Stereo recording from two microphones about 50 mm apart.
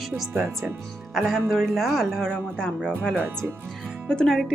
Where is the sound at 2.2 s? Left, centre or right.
Centre.